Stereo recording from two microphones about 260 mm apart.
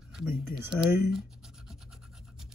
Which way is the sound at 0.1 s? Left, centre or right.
Centre.